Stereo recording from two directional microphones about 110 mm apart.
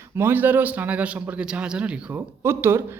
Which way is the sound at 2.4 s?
25° right (ahead or behind).